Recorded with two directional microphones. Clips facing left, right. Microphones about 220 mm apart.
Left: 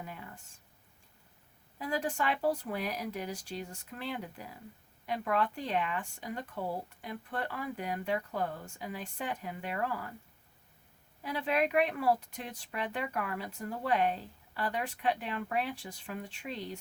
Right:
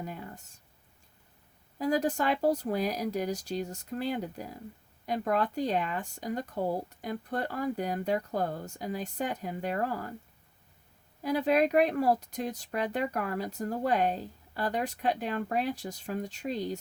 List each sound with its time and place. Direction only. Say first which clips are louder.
0.0 s a sound: right 5 dB; 40° right (ahead or behind)
1.8 s speech: right 6 dB; 40° right (ahead or behind)
11.2 s speech: right 6 dB; 40° right (ahead or behind)